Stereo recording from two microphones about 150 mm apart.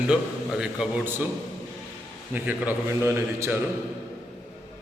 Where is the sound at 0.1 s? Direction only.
5° right (ahead or behind).